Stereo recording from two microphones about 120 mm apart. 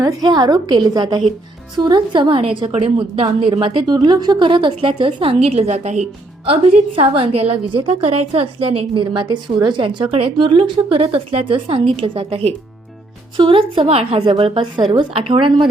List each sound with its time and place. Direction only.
0.0 s a woman's voice: 35° right (ahead or behind)